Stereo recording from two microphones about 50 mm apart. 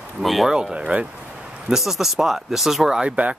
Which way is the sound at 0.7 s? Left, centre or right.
Right.